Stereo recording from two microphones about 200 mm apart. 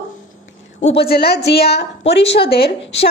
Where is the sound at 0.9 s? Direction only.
50° left (ahead or behind).